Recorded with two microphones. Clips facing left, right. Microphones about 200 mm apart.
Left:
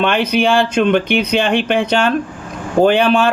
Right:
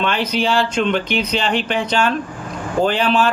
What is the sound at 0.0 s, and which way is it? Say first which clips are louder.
Speech: left 5 dB; 60° left (ahead or behind).